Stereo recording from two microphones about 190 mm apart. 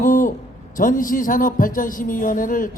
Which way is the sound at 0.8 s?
45° left (ahead or behind).